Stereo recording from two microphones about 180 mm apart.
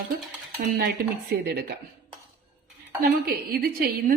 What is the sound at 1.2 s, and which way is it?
Speech, 60° right (ahead or behind).